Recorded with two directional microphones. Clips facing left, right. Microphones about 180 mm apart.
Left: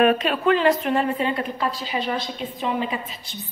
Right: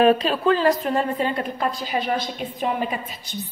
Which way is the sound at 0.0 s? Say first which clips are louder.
Right 1 dB; 30° right (ahead or behind).